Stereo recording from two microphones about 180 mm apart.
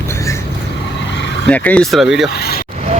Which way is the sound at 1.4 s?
10° left (ahead or behind).